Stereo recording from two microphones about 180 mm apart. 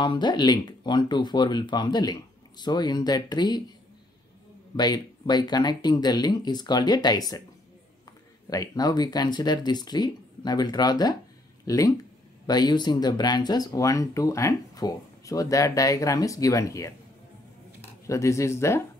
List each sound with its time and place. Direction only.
0.0 s speech: 25° left (ahead or behind)
4.7 s speech: 25° left (ahead or behind)
8.5 s speech: 20° left (ahead or behind)
18.0 s speech: 15° left (ahead or behind)